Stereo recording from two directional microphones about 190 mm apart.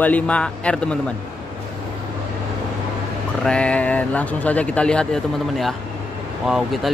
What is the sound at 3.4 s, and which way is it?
Speech, 5° left (ahead or behind).